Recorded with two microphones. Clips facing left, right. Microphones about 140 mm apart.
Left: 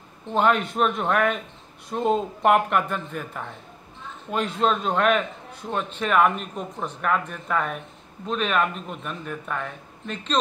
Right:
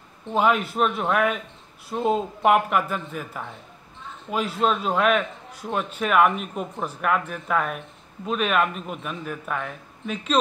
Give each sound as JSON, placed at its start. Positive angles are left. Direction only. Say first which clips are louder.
{"t": 0.3, "sound": "a man's voice", "louder": "even", "side_deg": -5}